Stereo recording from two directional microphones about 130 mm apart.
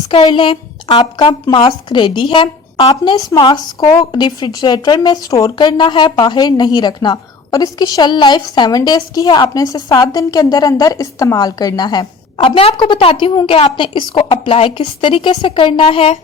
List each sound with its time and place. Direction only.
0.1 s speech: 40° left (ahead or behind)
12.4 s a woman's voice: 45° left (ahead or behind)
13.3 s speech: 35° left (ahead or behind)
13.6 s speech: 45° left (ahead or behind)